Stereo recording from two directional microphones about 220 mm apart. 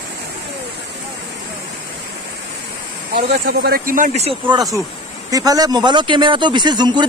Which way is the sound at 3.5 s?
45° right (ahead or behind).